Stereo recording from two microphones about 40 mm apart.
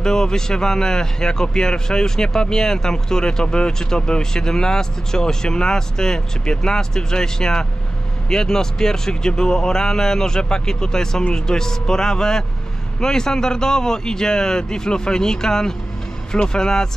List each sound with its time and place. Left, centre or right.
0.0 s a man's voice: centre